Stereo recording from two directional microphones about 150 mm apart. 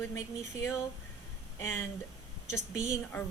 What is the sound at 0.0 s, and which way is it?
Speech, 20° left (ahead or behind).